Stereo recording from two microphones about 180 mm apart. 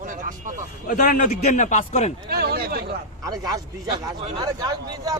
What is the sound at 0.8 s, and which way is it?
A man's voice, 50° left (ahead or behind).